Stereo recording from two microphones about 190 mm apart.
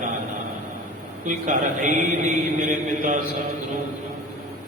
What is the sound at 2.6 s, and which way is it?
Speech, 45° right (ahead or behind).